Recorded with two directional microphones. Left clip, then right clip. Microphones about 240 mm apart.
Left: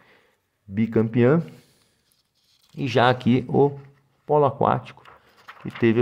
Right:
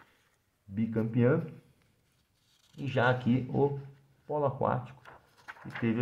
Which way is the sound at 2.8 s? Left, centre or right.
Left.